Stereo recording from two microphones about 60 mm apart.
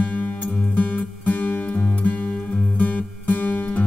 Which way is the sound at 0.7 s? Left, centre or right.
Left.